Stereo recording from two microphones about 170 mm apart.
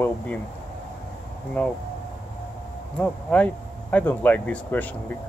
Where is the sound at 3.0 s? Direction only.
5° left (ahead or behind).